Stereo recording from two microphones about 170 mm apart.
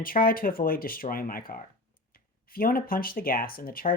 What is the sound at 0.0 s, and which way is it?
Speech, 55° left (ahead or behind).